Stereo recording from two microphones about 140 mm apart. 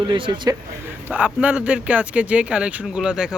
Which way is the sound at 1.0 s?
10° right (ahead or behind).